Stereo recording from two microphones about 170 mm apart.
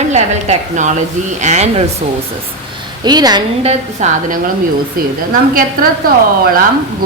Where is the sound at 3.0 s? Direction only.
25° right (ahead or behind).